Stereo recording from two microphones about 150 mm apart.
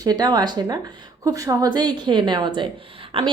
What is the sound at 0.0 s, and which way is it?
A woman's voice, 25° right (ahead or behind).